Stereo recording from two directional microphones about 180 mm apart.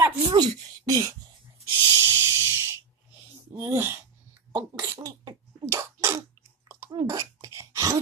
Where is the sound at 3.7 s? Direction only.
15° right (ahead or behind).